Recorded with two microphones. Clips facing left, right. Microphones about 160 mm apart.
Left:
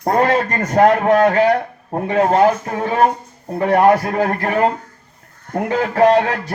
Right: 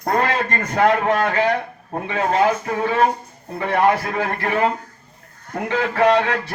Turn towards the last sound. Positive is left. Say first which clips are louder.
# left 3 dB
turn(degrees=40)  # may be behind; listen again after turning